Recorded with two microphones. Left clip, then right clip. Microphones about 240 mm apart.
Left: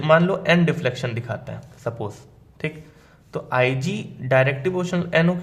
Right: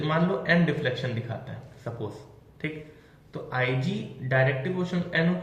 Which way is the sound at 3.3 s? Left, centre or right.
Left.